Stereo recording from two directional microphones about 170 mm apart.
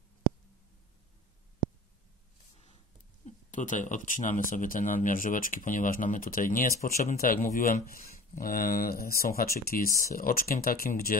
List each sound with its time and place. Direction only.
3.3 s speech: 50° left (ahead or behind)